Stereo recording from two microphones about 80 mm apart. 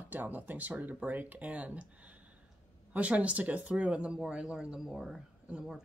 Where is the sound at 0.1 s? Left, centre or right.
Right.